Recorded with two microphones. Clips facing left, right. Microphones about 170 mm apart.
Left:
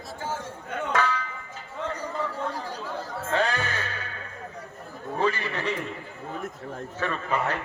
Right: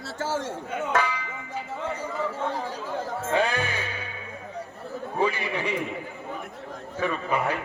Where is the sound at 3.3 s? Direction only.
15° right (ahead or behind).